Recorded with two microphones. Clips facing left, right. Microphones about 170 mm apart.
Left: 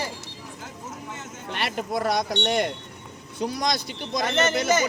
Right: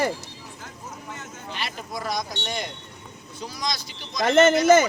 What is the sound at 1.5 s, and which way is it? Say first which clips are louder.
Speech: left 6 dB; 65° left (ahead or behind).